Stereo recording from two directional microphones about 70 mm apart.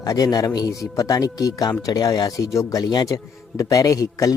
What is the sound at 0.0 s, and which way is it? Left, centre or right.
A man's voice, left.